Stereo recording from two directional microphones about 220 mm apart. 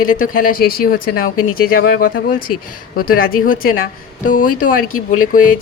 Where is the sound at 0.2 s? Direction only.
40° left (ahead or behind).